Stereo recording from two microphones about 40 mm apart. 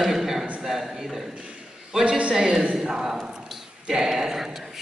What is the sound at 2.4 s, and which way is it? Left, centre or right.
A man's voice, centre.